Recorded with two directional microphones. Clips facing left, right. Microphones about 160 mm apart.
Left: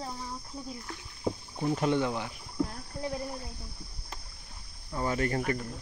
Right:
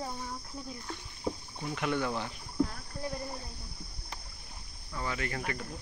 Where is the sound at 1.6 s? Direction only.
35° left (ahead or behind).